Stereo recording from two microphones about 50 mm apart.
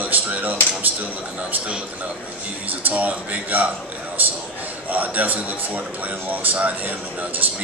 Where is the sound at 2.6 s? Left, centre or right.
Right.